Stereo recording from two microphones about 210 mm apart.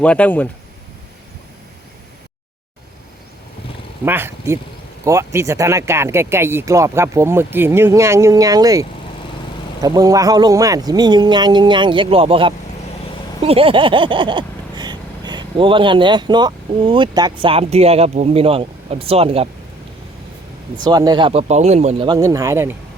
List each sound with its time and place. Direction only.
0.0 s speech: 5° left (ahead or behind)
4.0 s speech: 10° right (ahead or behind)
13.4 s a sound: 25° right (ahead or behind)
20.8 s speech: 20° right (ahead or behind)